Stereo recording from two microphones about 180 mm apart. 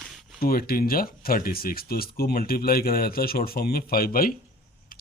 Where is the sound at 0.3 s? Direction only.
55° left (ahead or behind).